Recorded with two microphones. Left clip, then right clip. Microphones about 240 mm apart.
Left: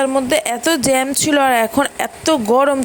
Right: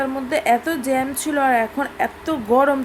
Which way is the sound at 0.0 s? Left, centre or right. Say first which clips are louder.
Left 5 dB; left.